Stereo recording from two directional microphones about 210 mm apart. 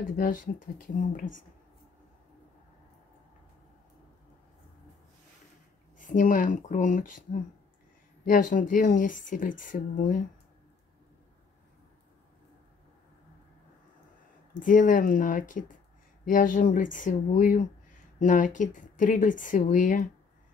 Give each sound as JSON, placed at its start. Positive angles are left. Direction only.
{"t": 0.0, "sound": "speech", "side_deg": 40}
{"t": 5.9, "sound": "speech", "side_deg": 40}
{"t": 8.3, "sound": "speech", "side_deg": 40}
{"t": 14.5, "sound": "speech", "side_deg": 40}